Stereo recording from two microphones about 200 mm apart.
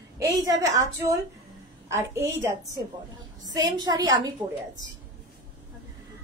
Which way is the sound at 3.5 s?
20° right (ahead or behind).